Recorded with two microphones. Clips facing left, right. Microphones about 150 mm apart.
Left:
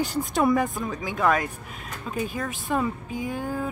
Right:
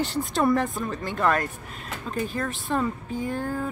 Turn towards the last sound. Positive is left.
turn(degrees=10)  # may be behind; listen again after turning